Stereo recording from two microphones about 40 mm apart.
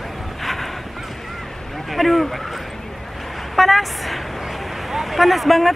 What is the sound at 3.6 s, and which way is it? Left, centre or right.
A woman's voice, centre.